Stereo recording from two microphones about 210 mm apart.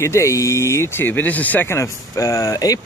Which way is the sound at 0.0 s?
15° left (ahead or behind).